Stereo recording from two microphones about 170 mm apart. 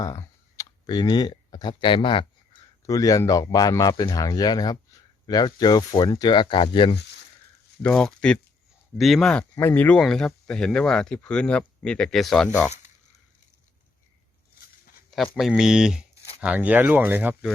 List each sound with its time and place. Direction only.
0.0 s clicking: 20° left (ahead or behind)
2.8 s speech: 20° left (ahead or behind)
7.8 s speech: 5° left (ahead or behind)
9.4 s speech: 15° left (ahead or behind)
15.4 s speech: centre (ahead or behind)